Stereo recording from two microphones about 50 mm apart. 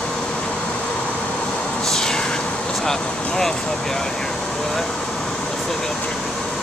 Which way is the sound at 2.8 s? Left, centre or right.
Centre.